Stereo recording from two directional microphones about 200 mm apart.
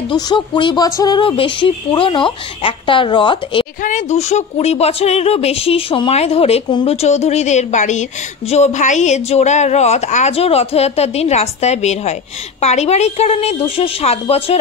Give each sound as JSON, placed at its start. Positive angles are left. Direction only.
{"t": 0.1, "sound": "speech", "side_deg": 20}
{"t": 3.8, "sound": "speech", "side_deg": 35}